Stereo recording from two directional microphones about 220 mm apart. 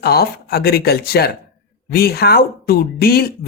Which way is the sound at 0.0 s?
45° left (ahead or behind).